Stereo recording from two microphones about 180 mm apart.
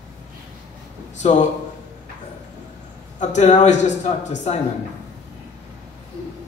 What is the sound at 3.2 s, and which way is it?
Speech, 40° left (ahead or behind).